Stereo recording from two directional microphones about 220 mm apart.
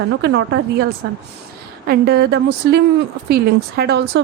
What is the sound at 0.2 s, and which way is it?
Speech, 50° right (ahead or behind).